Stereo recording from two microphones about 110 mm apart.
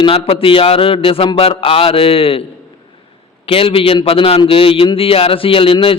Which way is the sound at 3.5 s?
60° left (ahead or behind).